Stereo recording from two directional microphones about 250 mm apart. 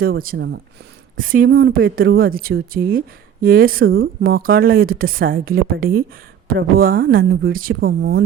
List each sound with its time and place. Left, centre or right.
0.0 s speech: right
1.1 s speech: right
7.7 s speech: right